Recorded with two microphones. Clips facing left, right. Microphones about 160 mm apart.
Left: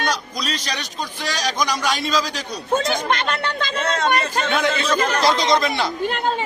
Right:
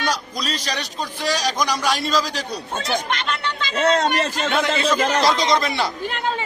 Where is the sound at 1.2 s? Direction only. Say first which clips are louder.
Right 2 dB; 5° right (ahead or behind).